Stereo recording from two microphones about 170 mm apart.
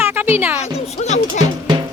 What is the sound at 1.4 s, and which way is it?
Music, 25° right (ahead or behind).